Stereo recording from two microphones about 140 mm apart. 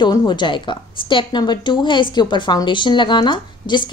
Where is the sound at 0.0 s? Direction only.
30° left (ahead or behind).